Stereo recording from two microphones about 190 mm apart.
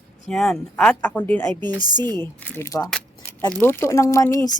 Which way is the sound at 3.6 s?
10° left (ahead or behind).